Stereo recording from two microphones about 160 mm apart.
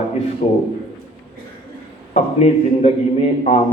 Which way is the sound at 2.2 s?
40° left (ahead or behind).